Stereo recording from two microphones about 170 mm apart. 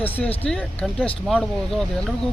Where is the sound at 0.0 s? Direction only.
10° left (ahead or behind).